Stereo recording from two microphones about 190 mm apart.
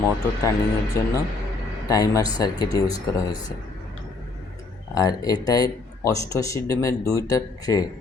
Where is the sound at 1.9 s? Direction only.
20° left (ahead or behind).